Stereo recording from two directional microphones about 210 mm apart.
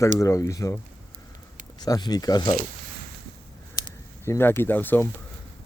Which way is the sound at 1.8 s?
20° left (ahead or behind).